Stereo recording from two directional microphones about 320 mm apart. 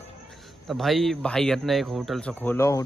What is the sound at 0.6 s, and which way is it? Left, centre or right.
Speech, centre.